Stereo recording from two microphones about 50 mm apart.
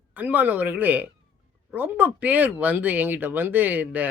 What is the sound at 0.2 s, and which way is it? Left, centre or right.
Speech, right.